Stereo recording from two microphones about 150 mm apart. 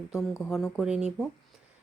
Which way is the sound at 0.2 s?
15° left (ahead or behind).